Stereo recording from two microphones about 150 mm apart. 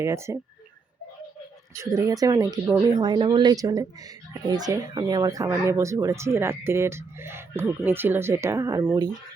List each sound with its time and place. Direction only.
0.0 s speech: 20° right (ahead or behind)
1.8 s speech: 20° right (ahead or behind)